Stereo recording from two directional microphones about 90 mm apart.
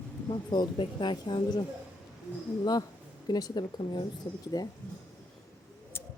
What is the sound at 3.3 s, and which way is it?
Speech, 45° left (ahead or behind).